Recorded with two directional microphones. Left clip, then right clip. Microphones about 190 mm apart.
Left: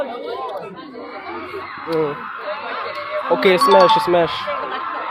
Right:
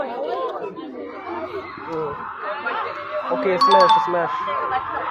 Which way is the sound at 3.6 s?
Centre (ahead or behind).